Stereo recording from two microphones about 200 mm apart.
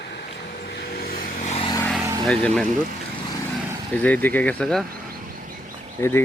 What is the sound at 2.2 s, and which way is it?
Speech, 5° left (ahead or behind).